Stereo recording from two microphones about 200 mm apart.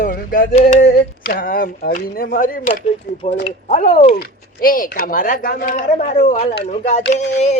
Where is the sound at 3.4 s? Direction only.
35° left (ahead or behind).